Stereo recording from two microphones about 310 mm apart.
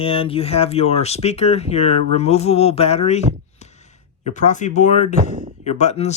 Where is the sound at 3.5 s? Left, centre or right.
Left.